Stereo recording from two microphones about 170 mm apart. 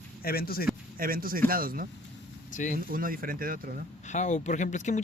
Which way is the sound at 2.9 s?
55° right (ahead or behind).